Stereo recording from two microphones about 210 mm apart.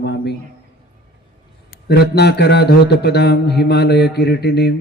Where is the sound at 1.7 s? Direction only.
50° left (ahead or behind).